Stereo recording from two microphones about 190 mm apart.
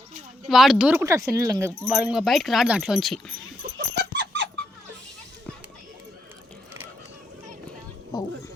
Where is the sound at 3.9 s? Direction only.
65° right (ahead or behind).